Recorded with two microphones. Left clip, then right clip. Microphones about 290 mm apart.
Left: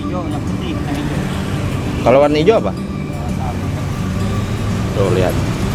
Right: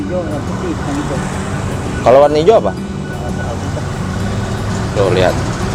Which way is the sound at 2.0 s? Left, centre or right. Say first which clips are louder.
Right 3 dB; centre.